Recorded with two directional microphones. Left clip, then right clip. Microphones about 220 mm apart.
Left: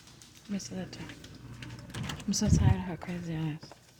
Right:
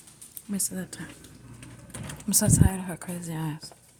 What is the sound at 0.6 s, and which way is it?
Speech, 35° right (ahead or behind).